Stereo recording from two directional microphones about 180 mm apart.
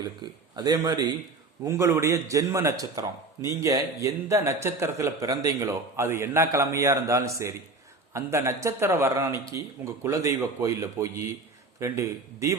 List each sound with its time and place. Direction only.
0.5 s a man's voice: 20° right (ahead or behind)